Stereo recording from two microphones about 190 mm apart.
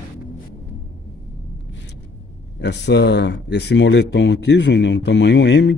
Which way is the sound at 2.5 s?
65° left (ahead or behind).